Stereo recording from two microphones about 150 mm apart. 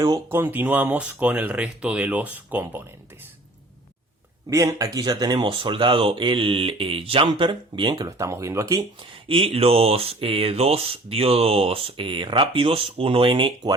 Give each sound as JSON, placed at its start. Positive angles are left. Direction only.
{"t": 0.3, "sound": "speech", "side_deg": -15}
{"t": 4.4, "sound": "speech", "side_deg": -20}
{"t": 9.3, "sound": "speech", "side_deg": -40}